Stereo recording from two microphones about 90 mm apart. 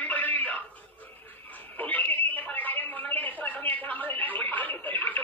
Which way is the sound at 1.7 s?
20° left (ahead or behind).